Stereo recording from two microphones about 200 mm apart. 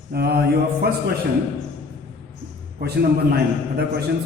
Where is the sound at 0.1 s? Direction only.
50° right (ahead or behind).